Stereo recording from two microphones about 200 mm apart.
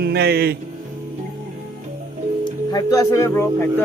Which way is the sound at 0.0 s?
55° right (ahead or behind).